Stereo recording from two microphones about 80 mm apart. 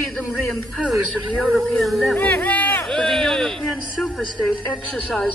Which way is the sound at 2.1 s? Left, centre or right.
Centre.